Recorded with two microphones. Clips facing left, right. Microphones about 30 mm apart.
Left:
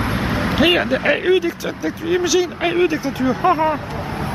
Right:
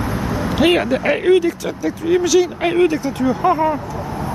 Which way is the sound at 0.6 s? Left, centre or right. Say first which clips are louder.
Right 1 dB; centre.